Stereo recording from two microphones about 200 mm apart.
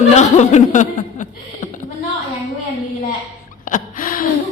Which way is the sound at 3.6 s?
40° left (ahead or behind).